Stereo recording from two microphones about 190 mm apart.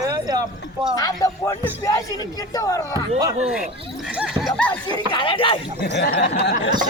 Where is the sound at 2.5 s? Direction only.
20° left (ahead or behind).